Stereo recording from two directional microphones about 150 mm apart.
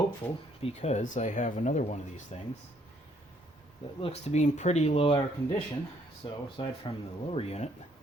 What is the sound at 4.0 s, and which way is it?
Speech, 45° left (ahead or behind).